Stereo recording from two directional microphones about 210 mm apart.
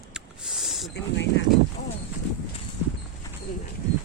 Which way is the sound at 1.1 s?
60° left (ahead or behind).